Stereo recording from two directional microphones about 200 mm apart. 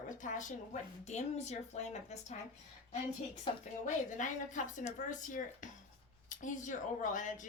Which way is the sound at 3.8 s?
40° left (ahead or behind).